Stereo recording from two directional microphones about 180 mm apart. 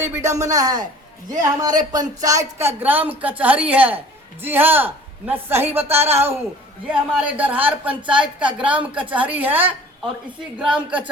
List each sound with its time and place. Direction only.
0.0 s speech: 15° right (ahead or behind)